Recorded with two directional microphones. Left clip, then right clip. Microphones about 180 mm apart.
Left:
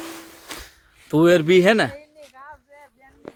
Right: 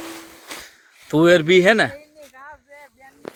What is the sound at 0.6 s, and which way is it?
Speech, 5° left (ahead or behind).